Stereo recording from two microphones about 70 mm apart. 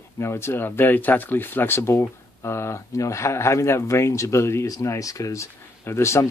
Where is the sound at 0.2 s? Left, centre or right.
Left.